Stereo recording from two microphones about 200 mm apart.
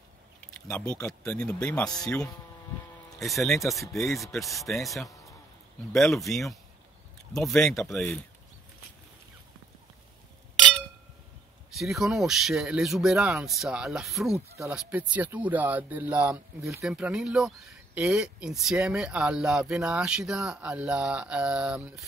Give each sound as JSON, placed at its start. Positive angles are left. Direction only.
{"t": 0.7, "sound": "speech", "side_deg": 5}
{"t": 1.9, "sound": "speech", "side_deg": 20}
{"t": 3.2, "sound": "speech", "side_deg": 0}
{"t": 11.7, "sound": "speech", "side_deg": 0}